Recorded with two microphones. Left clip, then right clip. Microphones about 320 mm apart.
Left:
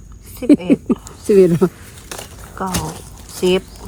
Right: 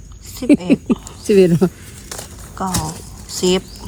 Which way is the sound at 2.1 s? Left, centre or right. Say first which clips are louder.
Left 1 dB; left.